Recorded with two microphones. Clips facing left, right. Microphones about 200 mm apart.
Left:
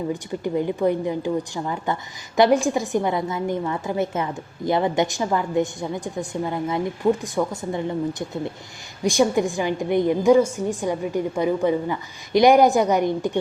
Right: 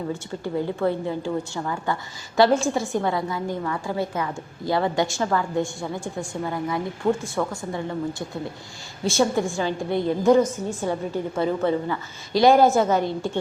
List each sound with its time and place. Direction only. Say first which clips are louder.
0.1 s a woman's voice: left 3 dB; 15° left (ahead or behind)
9.0 s a woman's voice: left 2 dB; 15° left (ahead or behind)